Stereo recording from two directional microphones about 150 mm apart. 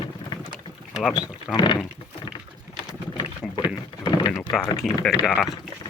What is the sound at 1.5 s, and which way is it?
Speech, 30° left (ahead or behind).